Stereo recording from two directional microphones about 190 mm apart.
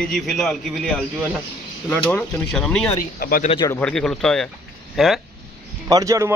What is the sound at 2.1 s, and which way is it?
Speech, 5° left (ahead or behind).